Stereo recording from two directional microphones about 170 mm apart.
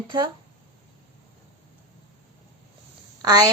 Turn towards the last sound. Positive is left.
turn(degrees=-20)  # may be behind; listen again after turning